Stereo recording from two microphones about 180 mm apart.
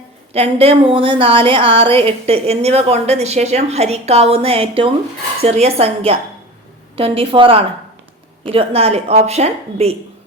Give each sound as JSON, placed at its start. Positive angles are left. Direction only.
{"t": 0.3, "sound": "speech", "side_deg": -35}